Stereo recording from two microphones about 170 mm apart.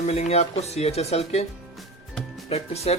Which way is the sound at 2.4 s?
35° left (ahead or behind).